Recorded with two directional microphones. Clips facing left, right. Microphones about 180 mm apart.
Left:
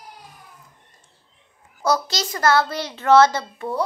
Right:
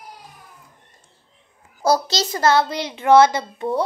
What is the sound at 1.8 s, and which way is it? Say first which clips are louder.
A child's voice: right 3 dB; 30° right (ahead or behind).